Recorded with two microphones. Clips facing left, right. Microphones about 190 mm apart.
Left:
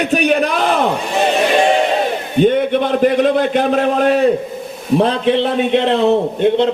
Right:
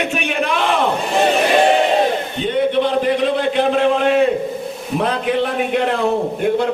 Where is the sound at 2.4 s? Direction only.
50° left (ahead or behind).